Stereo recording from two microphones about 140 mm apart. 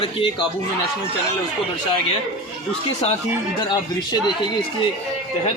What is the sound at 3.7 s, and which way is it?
Speech, 30° left (ahead or behind).